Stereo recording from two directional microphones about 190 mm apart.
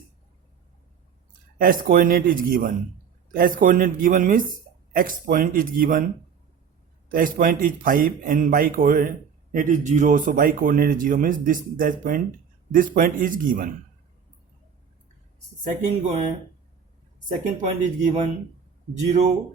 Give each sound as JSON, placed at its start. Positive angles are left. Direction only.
{"t": 1.5, "sound": "speech", "side_deg": -50}
{"t": 7.1, "sound": "speech", "side_deg": -45}
{"t": 17.2, "sound": "speech", "side_deg": -40}